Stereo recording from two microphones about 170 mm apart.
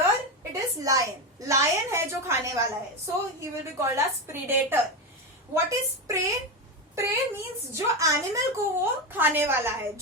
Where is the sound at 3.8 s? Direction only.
15° right (ahead or behind).